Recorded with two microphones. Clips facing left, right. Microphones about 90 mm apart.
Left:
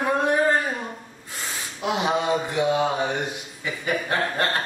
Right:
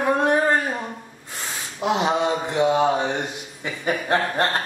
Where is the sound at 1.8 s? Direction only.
25° right (ahead or behind).